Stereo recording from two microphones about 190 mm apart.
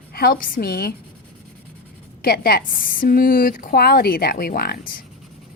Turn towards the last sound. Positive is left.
turn(degrees=50)  # may be behind; listen again after turning